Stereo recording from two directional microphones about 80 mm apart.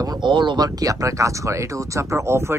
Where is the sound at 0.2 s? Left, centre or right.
Right.